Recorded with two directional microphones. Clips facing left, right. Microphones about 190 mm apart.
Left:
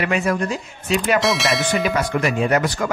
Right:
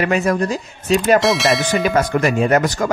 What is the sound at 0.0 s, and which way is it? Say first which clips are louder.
Speech: right 3 dB; 40° right (ahead or behind).